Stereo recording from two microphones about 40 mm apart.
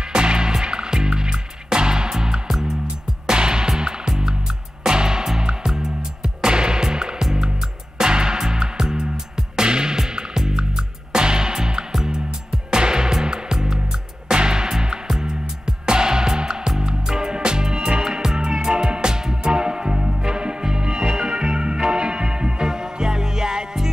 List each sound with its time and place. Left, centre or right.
0.1 s music: right